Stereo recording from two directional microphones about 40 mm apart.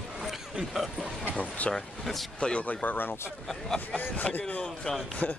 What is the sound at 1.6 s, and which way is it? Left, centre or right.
Speech, left.